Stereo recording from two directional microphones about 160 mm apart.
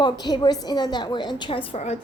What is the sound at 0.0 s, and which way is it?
A woman's voice, 25° left (ahead or behind).